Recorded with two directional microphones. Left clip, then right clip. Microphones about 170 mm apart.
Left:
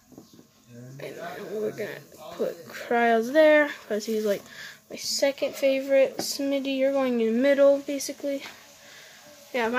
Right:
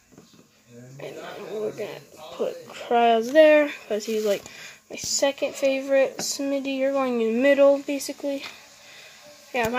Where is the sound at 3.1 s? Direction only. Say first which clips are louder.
Right 3 dB; centre (ahead or behind).